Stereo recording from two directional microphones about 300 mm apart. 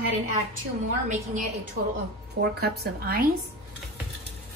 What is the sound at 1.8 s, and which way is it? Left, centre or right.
A woman's voice, right.